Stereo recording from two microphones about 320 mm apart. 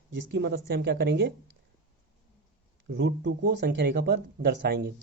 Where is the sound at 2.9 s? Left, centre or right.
Right.